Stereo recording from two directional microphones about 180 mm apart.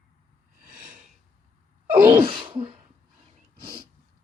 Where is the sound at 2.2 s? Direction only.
30° right (ahead or behind).